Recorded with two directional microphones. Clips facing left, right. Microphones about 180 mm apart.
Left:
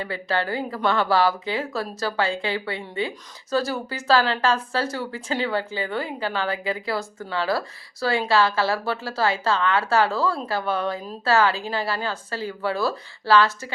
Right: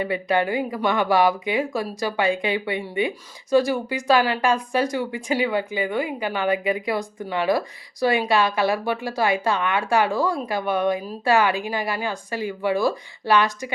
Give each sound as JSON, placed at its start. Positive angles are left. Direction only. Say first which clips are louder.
{"t": 0.0, "sound": "speech", "louder": "right 4 dB", "side_deg": -15}